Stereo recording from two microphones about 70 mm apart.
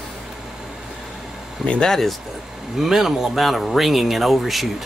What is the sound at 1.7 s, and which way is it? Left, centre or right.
Speech, centre.